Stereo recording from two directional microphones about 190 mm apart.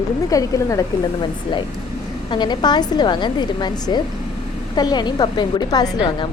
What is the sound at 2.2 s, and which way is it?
A woman's voice, 25° left (ahead or behind).